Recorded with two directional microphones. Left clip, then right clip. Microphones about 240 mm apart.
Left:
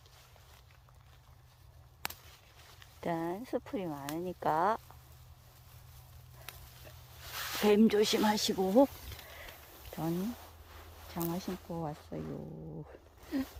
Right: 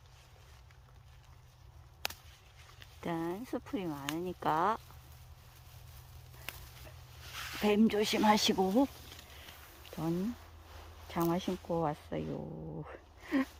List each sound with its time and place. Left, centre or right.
2.8 s speech: centre
7.2 s a sound: left
7.6 s speech: centre
8.3 s speech: centre
9.9 s a sound: centre
11.1 s speech: centre